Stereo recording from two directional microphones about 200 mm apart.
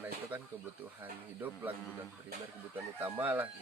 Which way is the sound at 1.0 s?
10° right (ahead or behind).